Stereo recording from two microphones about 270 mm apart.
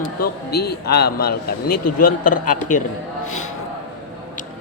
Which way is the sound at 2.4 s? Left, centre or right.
Left.